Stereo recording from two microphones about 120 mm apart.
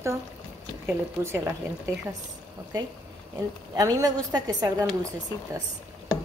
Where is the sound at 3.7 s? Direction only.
30° right (ahead or behind).